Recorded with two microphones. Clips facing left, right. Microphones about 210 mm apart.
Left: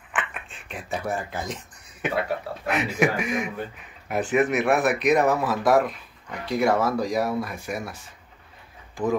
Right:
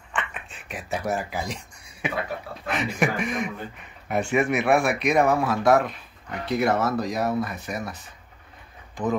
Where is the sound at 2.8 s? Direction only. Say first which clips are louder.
Left 1 dB; 5° left (ahead or behind).